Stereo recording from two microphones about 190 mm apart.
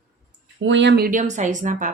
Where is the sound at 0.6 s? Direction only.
70° right (ahead or behind); by 1.9 s 40° right (ahead or behind).